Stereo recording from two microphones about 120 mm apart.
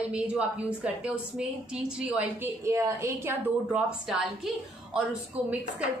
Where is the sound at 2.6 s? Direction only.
25° right (ahead or behind).